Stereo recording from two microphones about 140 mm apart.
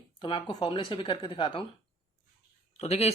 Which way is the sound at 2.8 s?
50° left (ahead or behind).